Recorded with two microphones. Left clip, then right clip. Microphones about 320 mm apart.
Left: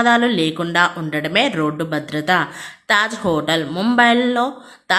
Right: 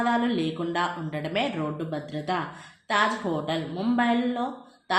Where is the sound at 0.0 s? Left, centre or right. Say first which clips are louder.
Left 10 dB; left.